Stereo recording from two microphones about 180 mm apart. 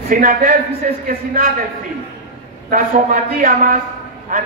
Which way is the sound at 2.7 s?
50° right (ahead or behind).